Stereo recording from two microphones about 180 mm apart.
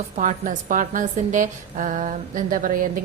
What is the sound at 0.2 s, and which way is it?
A woman's voice, 45° right (ahead or behind).